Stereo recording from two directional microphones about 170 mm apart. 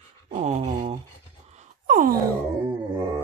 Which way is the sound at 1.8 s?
55° right (ahead or behind).